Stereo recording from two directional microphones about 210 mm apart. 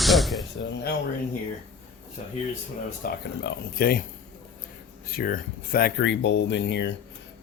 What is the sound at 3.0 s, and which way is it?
Speech, 40° left (ahead or behind).